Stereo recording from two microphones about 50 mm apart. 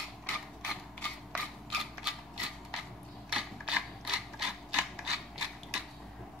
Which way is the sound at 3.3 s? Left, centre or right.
Centre.